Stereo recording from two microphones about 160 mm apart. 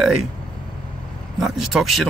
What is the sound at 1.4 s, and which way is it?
Speech, centre (ahead or behind).